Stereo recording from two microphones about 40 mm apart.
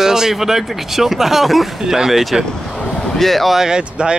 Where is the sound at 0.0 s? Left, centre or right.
Centre.